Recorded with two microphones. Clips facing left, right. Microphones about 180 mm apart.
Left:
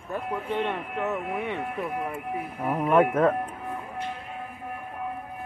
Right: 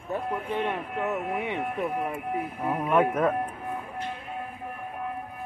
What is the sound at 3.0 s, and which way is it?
Speech, 20° right (ahead or behind).